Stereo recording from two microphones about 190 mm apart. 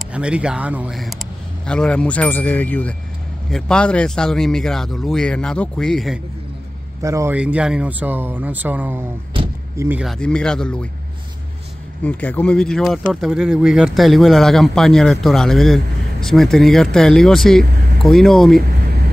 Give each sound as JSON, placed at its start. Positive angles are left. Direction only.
{"t": 0.1, "sound": "speech", "side_deg": -5}
{"t": 7.0, "sound": "speech", "side_deg": -15}
{"t": 9.3, "sound": "vehicle", "side_deg": -30}
{"t": 9.8, "sound": "speech", "side_deg": -10}
{"t": 12.0, "sound": "speech", "side_deg": 5}